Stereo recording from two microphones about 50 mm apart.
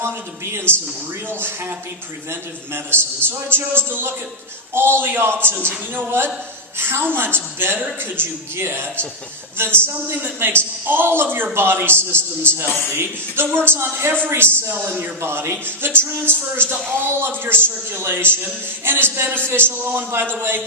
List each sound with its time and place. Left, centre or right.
1.3 s a man's voice: right
14.8 s a man's voice: right
15.2 s a man's voice: right